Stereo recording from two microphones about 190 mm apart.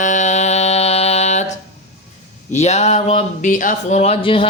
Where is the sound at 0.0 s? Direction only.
40° left (ahead or behind).